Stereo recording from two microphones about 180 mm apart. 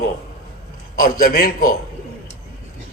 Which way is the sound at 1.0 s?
55° left (ahead or behind).